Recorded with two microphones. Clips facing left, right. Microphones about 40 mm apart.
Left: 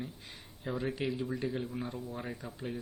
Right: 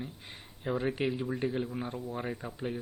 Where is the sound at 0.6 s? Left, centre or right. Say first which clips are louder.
Right 4 dB; right.